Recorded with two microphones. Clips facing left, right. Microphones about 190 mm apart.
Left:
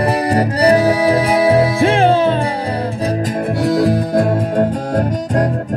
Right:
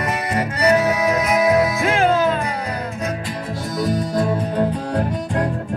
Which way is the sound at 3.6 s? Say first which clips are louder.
Left 6 dB; 70° left (ahead or behind).